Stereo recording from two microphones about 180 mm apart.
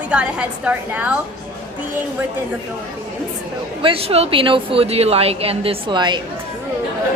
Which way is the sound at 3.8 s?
30° right (ahead or behind).